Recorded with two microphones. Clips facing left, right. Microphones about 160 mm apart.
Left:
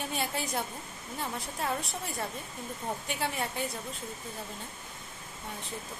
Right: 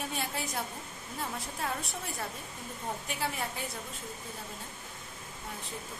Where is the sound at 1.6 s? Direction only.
Centre (ahead or behind).